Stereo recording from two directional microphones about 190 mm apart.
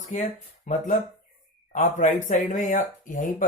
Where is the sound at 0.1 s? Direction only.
40° left (ahead or behind).